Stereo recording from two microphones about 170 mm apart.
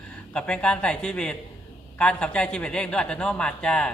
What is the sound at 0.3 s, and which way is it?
A man's voice, 5° left (ahead or behind).